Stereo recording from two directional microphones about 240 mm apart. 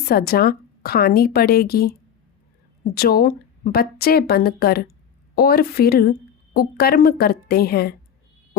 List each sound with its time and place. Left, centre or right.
0.0 s a woman's voice: left